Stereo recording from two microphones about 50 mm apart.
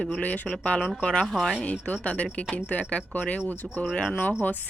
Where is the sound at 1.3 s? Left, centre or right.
Centre.